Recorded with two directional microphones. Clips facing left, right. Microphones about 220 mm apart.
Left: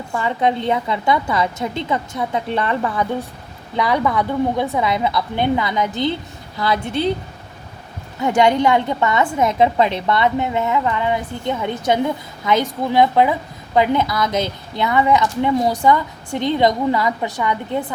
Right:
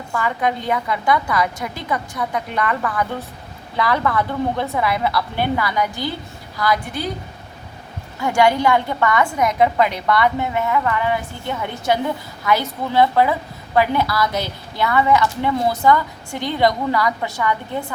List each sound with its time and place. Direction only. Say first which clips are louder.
0.1 s a woman's voice: left 2 dB; 25° left (ahead or behind)
8.2 s a woman's voice: left 1 dB; 20° left (ahead or behind)